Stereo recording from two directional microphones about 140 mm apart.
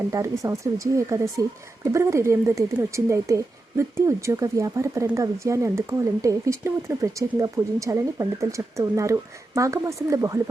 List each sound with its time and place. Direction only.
0.1 s a woman's voice: 20° right (ahead or behind)